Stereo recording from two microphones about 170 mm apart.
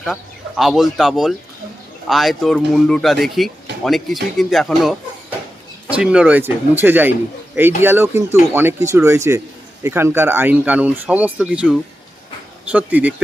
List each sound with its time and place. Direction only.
0.0 s speech: centre (ahead or behind)